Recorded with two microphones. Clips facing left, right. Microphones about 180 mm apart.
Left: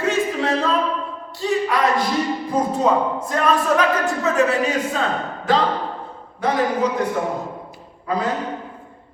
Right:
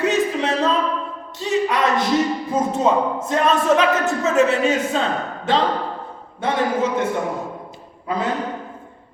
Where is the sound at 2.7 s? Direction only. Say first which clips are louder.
Right 1 dB; 20° right (ahead or behind).